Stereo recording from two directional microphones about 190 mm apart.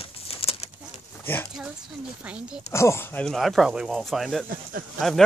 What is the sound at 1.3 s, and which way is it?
Speech, 10° left (ahead or behind).